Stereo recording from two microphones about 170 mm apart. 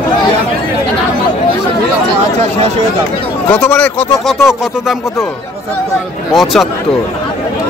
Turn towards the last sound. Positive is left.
turn(degrees=0)  # may be behind; listen again after turning